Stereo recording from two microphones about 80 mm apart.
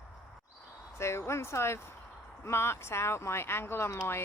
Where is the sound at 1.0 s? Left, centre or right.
Left.